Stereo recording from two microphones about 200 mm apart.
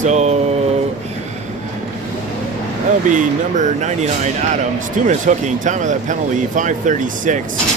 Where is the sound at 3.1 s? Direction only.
40° right (ahead or behind).